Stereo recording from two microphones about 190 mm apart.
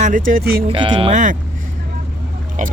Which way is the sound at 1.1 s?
40° right (ahead or behind).